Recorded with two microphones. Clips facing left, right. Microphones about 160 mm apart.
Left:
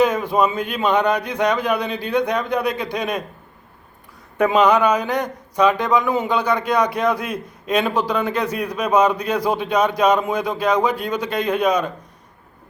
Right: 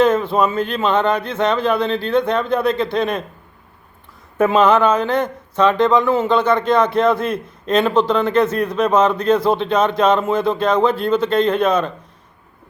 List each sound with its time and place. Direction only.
0.0 s a man's voice: 10° left (ahead or behind)
4.4 s a man's voice: 15° left (ahead or behind)